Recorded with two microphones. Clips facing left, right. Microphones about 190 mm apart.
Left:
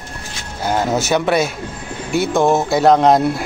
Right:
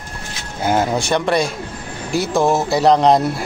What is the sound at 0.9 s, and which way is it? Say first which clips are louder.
Speech: left 1 dB; 5° left (ahead or behind).